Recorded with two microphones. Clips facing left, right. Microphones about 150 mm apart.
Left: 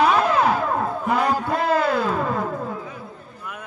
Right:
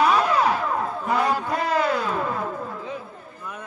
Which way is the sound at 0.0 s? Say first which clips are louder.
Left 2 dB; 55° left (ahead or behind).